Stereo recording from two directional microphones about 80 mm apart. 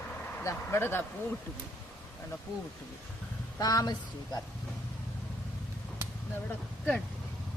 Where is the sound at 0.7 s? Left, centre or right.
Left.